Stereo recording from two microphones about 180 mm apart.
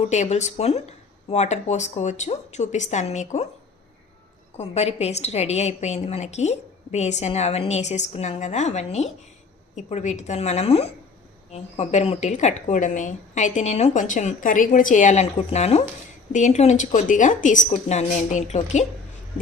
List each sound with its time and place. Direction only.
0.0 s a woman's voice: 40° left (ahead or behind)
4.5 s a woman's voice: 35° left (ahead or behind)